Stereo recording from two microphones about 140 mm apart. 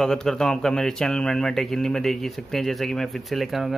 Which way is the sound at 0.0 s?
5° left (ahead or behind).